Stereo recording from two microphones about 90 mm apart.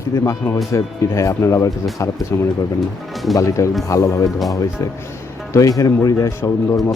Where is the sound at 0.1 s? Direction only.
30° left (ahead or behind).